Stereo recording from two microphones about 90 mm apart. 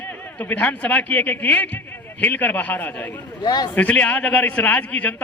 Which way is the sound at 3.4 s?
50° left (ahead or behind).